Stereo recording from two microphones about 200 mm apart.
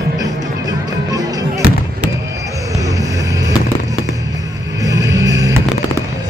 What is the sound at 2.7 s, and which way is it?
Music, 15° right (ahead or behind).